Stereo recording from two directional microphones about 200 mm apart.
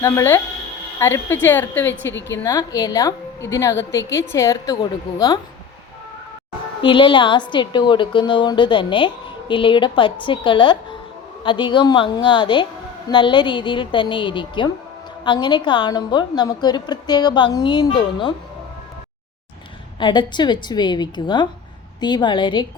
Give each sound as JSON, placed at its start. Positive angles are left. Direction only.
{"t": 0.0, "sound": "a woman's voice", "side_deg": 10}
{"t": 2.1, "sound": "a woman's voice", "side_deg": 65}
{"t": 2.4, "sound": "a woman's voice", "side_deg": 20}
{"t": 6.8, "sound": "a woman's voice", "side_deg": 25}
{"t": 20.0, "sound": "a woman's voice", "side_deg": 20}